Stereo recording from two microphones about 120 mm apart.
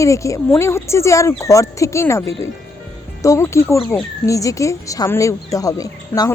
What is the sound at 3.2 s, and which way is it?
Speech, 25° left (ahead or behind).